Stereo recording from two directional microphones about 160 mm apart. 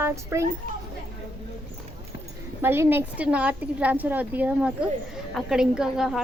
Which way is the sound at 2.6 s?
15° right (ahead or behind).